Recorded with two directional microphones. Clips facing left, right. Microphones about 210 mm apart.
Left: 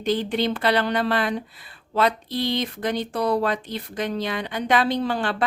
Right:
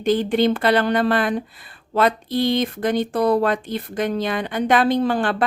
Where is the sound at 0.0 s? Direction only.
50° right (ahead or behind).